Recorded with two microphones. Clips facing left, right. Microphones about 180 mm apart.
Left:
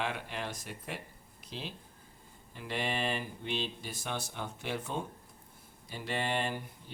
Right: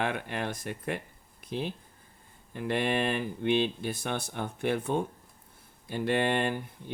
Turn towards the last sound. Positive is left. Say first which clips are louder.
# right 7 dB
turn(degrees=-55)  # may be behind; listen again after turning